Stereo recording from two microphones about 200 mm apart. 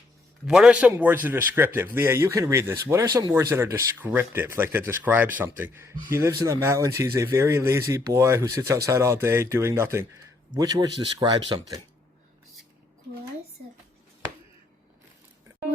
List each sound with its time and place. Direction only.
0.4 s speech: 5° right (ahead or behind); by 11.8 s 25° right (ahead or behind)